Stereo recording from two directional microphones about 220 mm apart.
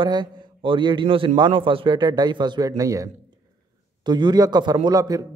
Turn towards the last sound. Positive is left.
turn(degrees=-15)  # may be behind; listen again after turning